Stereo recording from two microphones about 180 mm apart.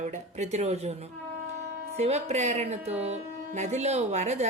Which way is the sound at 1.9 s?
35° right (ahead or behind).